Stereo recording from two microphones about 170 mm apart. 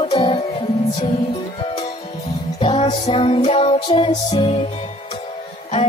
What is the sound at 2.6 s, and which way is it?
Music, 35° left (ahead or behind).